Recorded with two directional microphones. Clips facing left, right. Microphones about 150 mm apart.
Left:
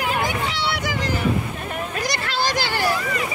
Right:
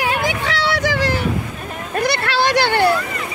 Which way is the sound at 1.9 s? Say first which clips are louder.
Right 9 dB; 60° right (ahead or behind).